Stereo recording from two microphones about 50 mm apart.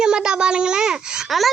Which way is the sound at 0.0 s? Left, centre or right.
Centre.